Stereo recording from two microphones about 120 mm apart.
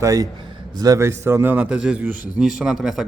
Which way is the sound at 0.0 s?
25° right (ahead or behind).